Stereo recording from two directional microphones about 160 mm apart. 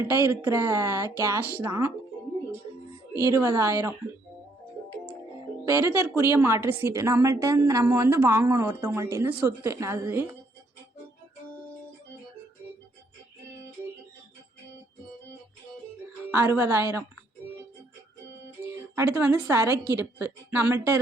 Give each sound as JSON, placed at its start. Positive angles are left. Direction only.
{"t": 0.0, "sound": "a woman's voice", "side_deg": -15}
{"t": 3.2, "sound": "a woman's voice", "side_deg": -20}
{"t": 5.7, "sound": "a woman's voice", "side_deg": -15}
{"t": 16.3, "sound": "a woman's voice", "side_deg": -15}
{"t": 19.1, "sound": "a woman's voice", "side_deg": -20}